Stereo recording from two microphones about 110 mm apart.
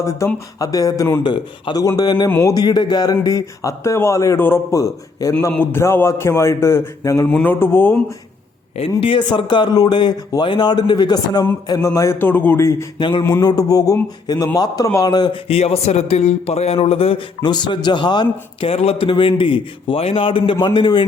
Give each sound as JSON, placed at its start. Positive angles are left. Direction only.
{"t": 0.2, "sound": "a man's voice", "side_deg": 30}
{"t": 1.2, "sound": "a man's voice", "side_deg": 45}
{"t": 4.7, "sound": "a man's voice", "side_deg": 30}
{"t": 7.3, "sound": "speech", "side_deg": 15}
{"t": 9.0, "sound": "speech", "side_deg": 50}
{"t": 11.7, "sound": "speech", "side_deg": 30}
{"t": 13.0, "sound": "speech", "side_deg": 45}
{"t": 13.4, "sound": "a man's voice", "side_deg": 35}
{"t": 15.4, "sound": "a man's voice", "side_deg": 70}
{"t": 17.4, "sound": "a man's voice", "side_deg": 40}
{"t": 18.6, "sound": "speech", "side_deg": 65}